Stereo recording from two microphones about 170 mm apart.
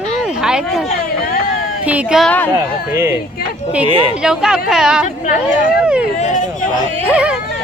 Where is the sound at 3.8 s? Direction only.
30° right (ahead or behind).